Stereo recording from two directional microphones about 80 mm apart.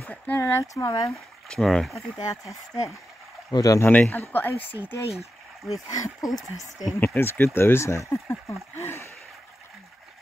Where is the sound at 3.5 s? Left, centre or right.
Left.